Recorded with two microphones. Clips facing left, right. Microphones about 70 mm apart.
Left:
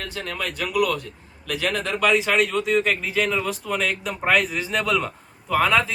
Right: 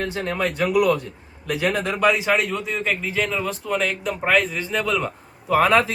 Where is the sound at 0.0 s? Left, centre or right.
Right.